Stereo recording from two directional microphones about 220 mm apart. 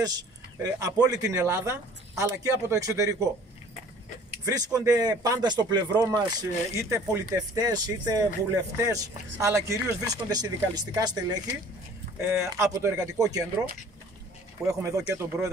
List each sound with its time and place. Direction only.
0.0 s speech: 15° right (ahead or behind)
4.5 s speech: 15° right (ahead or behind)
12.4 s speech: 15° right (ahead or behind)
14.7 s speech: 15° right (ahead or behind)